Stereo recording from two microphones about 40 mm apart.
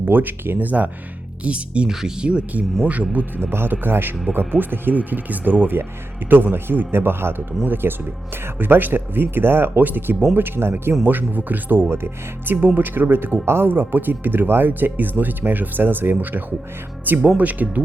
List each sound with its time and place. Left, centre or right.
0.0 s speech: right
0.6 s speech: right
1.5 s speech: right
1.9 s speech: centre
2.8 s speech: right
3.3 s speech: right
5.7 s speech: right
6.3 s speech: right
7.6 s speech: right
11.0 s speech: right
12.5 s speech: right
13.4 s speech: right
13.7 s speech: right
17.3 s speech: right